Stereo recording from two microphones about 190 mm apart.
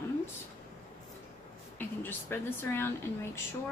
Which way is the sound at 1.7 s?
10° left (ahead or behind).